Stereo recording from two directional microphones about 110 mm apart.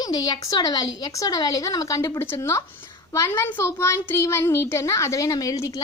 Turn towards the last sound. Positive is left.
turn(degrees=30)  # may be behind; listen again after turning